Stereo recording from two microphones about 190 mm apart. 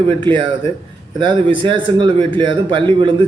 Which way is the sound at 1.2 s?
25° right (ahead or behind).